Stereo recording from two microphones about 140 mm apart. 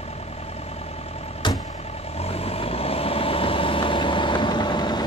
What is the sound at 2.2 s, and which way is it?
Vehicle, 45° left (ahead or behind).